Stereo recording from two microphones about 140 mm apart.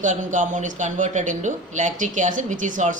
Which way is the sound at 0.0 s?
65° right (ahead or behind).